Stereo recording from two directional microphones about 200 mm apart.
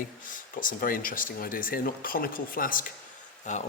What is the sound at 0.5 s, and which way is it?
Speech, 45° left (ahead or behind).